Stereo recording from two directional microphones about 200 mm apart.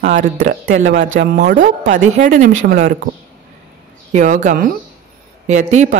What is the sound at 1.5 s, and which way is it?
Speech, 40° right (ahead or behind).